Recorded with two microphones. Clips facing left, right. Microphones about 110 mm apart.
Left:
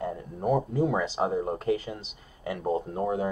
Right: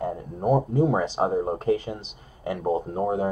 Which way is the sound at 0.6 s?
25° right (ahead or behind).